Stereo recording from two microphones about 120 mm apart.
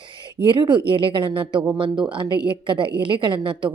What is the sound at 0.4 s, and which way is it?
A woman's voice, 40° right (ahead or behind).